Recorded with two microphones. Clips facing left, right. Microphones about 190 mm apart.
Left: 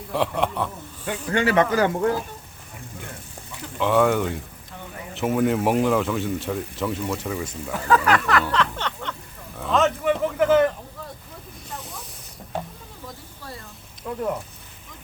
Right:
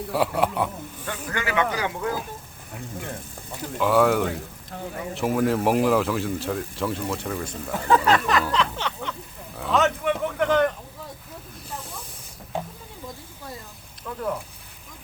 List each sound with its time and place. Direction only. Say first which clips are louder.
0.1 s a man's voice: even; 5° right (ahead or behind)
1.0 s a man's voice: left 6 dB; 15° left (ahead or behind)
1.4 s speech: left 6 dB; 35° left (ahead or behind)
3.8 s speech: even; 5° right (ahead or behind)
7.4 s speech: even; 25° right (ahead or behind)
8.4 s a sound: left 1 dB; 10° right (ahead or behind)
9.6 s a sound: left 1 dB; centre (ahead or behind)
11.7 s snake: even; centre (ahead or behind)
14.1 s sizzle: left 4 dB; 15° left (ahead or behind)